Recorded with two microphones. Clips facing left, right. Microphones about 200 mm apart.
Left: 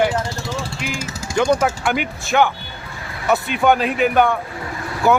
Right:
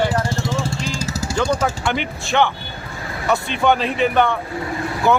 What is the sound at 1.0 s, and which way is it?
Vehicle, 40° right (ahead or behind).